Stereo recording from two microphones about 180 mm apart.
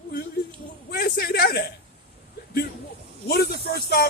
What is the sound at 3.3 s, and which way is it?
Speech, 60° left (ahead or behind).